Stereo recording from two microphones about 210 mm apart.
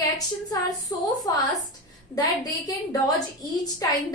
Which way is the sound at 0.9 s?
15° left (ahead or behind).